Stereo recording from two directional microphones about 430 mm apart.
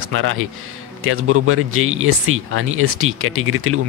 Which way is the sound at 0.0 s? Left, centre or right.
Right.